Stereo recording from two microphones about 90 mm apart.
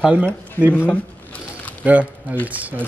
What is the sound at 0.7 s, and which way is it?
Speech, 20° left (ahead or behind).